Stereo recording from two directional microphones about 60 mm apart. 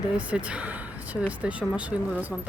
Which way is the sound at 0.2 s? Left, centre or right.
Right.